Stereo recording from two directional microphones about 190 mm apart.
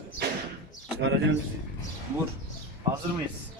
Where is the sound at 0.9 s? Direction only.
70° right (ahead or behind).